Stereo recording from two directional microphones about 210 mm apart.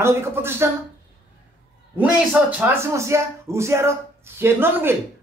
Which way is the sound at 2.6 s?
10° right (ahead or behind).